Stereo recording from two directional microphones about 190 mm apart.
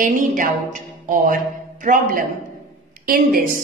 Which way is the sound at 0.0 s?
45° right (ahead or behind).